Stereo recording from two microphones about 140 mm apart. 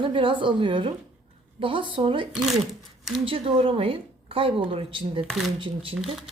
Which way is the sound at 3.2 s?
40° right (ahead or behind).